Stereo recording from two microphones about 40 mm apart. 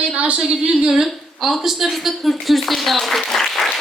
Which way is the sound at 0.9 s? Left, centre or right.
Centre.